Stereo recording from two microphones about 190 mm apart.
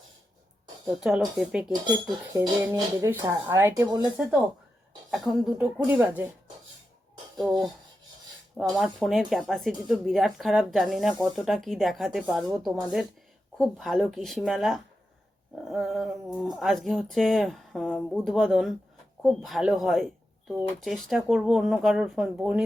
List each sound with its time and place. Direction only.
0.9 s speech: 5° right (ahead or behind)
2.3 s speech: 20° right (ahead or behind)
5.1 s speech: centre (ahead or behind)
8.7 s speech: centre (ahead or behind)